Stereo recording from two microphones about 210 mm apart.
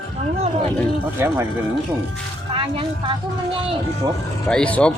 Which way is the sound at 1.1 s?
10° right (ahead or behind).